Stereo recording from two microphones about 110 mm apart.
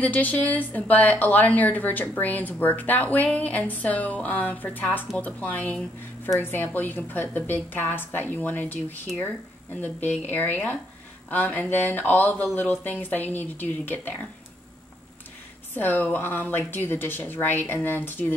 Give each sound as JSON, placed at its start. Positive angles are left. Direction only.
{"t": 0.0, "sound": "a woman's voice", "side_deg": 15}
{"t": 15.7, "sound": "a woman's voice", "side_deg": 15}